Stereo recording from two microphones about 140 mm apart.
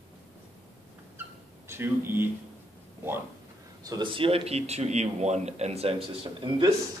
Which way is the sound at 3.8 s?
30° right (ahead or behind).